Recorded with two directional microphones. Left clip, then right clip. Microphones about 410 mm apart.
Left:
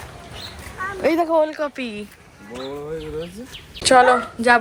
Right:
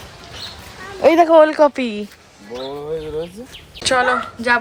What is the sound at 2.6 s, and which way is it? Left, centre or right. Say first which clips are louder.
Speech: right 4 dB; right.